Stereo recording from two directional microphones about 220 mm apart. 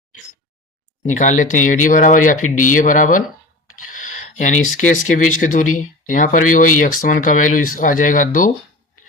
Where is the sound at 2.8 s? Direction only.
35° left (ahead or behind).